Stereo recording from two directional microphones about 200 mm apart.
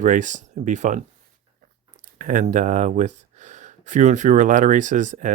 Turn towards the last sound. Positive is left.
turn(degrees=-40)  # may be behind; listen again after turning